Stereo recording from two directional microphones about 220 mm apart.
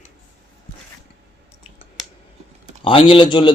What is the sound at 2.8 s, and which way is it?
Speech, 25° left (ahead or behind).